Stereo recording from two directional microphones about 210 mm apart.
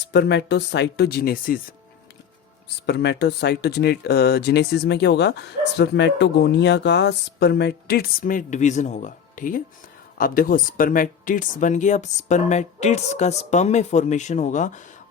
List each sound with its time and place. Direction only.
0.1 s speech: 55° left (ahead or behind)
2.8 s speech: 55° left (ahead or behind); by 14.8 s 35° left (ahead or behind)